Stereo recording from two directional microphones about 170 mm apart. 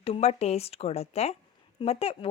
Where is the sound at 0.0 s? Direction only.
35° left (ahead or behind).